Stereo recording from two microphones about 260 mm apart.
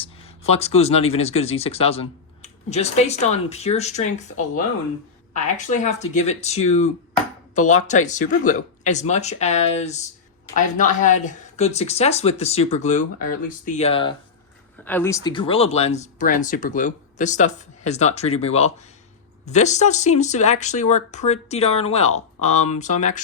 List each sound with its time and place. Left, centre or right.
0.0 s speech: left
14.8 s speech: centre; by 23.2 s left